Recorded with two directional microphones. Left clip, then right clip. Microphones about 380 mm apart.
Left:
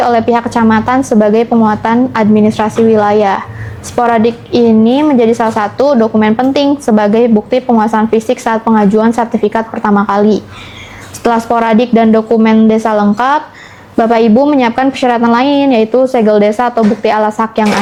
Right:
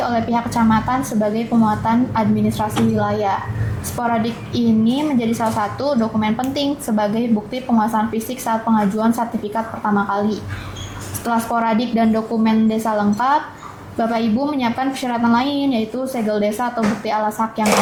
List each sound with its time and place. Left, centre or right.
0.0 s a woman's voice: left